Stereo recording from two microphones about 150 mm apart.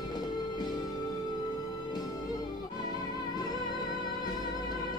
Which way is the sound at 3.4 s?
25° left (ahead or behind).